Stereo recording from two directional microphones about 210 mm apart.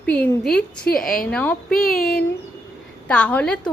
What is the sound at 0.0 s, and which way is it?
A woman's voice, 5° left (ahead or behind).